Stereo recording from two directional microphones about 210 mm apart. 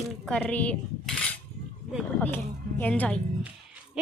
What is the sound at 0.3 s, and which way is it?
Speech, 5° left (ahead or behind).